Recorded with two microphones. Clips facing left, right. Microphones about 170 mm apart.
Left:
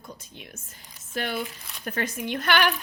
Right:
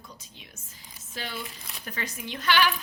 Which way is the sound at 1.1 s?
55° left (ahead or behind).